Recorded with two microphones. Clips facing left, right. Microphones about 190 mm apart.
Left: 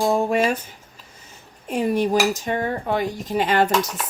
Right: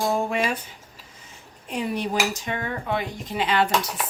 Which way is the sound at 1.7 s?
45° left (ahead or behind).